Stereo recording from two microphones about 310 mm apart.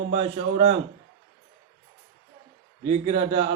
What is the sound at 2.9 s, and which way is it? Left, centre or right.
Speech, centre.